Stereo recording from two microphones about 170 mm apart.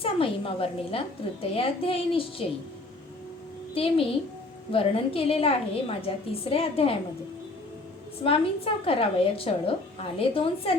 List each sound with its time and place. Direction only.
0.0 s a woman's voice: 35° left (ahead or behind)
3.8 s a woman's voice: 35° left (ahead or behind)
8.2 s a woman's voice: 30° left (ahead or behind)